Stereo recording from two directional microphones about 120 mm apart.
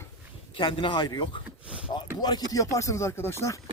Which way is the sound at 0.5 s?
40° left (ahead or behind).